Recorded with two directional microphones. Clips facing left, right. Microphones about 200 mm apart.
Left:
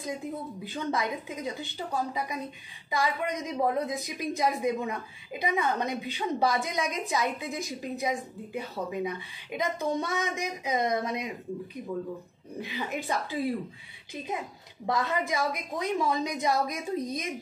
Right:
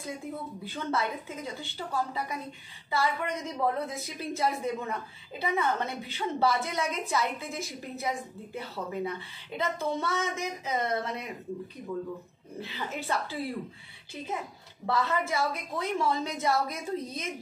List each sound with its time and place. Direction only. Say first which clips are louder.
0.7 s a woman's voice: left 1 dB; 15° left (ahead or behind)
12.5 s a woman's voice: left 3 dB; 15° left (ahead or behind)